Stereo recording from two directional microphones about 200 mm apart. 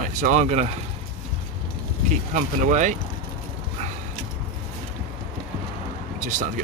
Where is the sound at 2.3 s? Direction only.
35° right (ahead or behind).